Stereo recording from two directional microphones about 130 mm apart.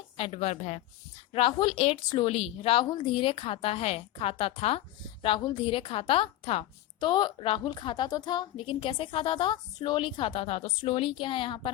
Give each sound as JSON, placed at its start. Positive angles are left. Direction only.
{"t": 0.2, "sound": "a woman's voice", "side_deg": 50}
{"t": 1.3, "sound": "a woman's voice", "side_deg": 45}